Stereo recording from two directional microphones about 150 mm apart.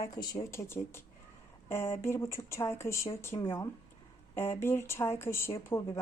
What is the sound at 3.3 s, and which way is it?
Speech, 35° left (ahead or behind).